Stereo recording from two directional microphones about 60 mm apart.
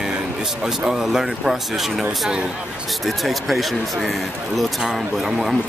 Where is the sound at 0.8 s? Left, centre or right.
Centre.